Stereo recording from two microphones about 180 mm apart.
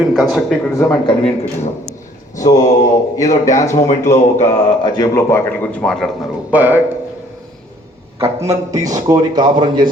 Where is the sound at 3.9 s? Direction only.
40° left (ahead or behind).